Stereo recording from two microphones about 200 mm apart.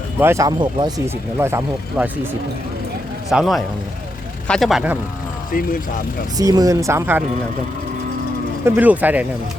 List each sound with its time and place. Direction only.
0.2 s speech: 15° right (ahead or behind)
3.2 s speech: centre (ahead or behind)
5.5 s speech: 45° left (ahead or behind)
6.3 s speech: 20° right (ahead or behind)
8.6 s speech: 10° right (ahead or behind)